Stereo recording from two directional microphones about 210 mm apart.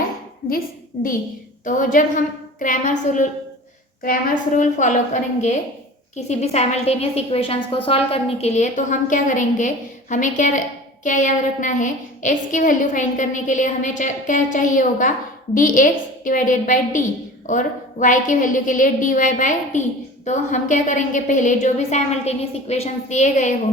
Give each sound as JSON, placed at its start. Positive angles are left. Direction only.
{"t": 1.6, "sound": "a woman's voice", "side_deg": 40}